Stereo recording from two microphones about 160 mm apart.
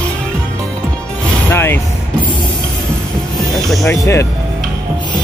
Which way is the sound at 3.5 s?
Centre (ahead or behind).